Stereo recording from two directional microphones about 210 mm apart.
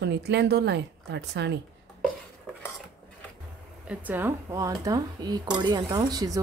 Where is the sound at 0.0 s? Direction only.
50° right (ahead or behind).